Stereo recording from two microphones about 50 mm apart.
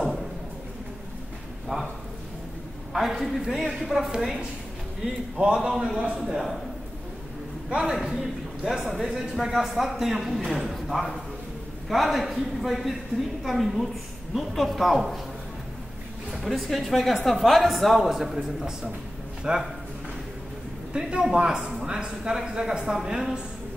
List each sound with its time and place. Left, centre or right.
2.9 s a man's voice: centre
5.4 s a woman's voice: centre
6.2 s speech: centre
7.7 s a man's voice: centre
16.3 s speech: centre
19.4 s a woman's voice: centre
20.9 s a woman's voice: centre